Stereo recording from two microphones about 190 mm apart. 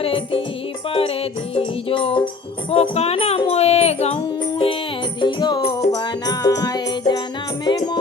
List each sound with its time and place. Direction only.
0.0 s music: 30° left (ahead or behind)